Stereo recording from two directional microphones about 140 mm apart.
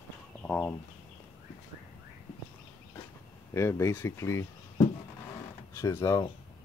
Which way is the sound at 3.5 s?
20° left (ahead or behind).